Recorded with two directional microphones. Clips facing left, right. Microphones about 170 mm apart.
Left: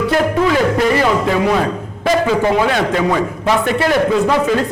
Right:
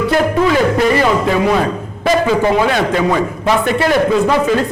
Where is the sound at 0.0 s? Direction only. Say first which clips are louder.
Right 1 dB; 15° right (ahead or behind).